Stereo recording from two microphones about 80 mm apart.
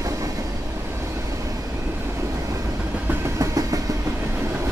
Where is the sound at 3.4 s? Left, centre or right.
Right.